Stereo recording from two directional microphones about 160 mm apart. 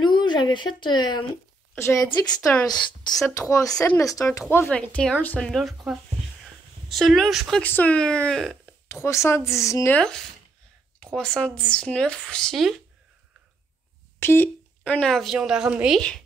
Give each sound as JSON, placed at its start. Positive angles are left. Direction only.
{"t": 0.0, "sound": "speech", "side_deg": 30}
{"t": 1.8, "sound": "speech", "side_deg": 20}
{"t": 6.4, "sound": "a sound", "side_deg": 0}
{"t": 7.6, "sound": "speech", "side_deg": 10}
{"t": 9.0, "sound": "speech", "side_deg": 15}
{"t": 9.9, "sound": "speech", "side_deg": 5}
{"t": 14.2, "sound": "speech", "side_deg": 15}